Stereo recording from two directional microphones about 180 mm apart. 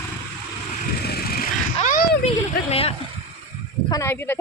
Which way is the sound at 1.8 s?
45° left (ahead or behind).